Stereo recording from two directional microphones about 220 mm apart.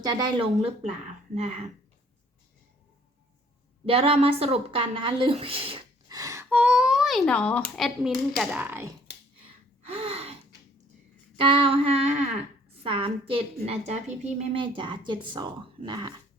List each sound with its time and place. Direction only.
0.0 s speech: 20° right (ahead or behind)
3.8 s a woman's voice: 25° right (ahead or behind); by 8.9 s 10° right (ahead or behind)
9.8 s gasp: 25° right (ahead or behind)
11.3 s speech: 25° right (ahead or behind)